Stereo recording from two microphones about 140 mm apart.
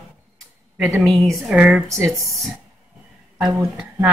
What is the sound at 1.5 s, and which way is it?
Speech, 5° right (ahead or behind).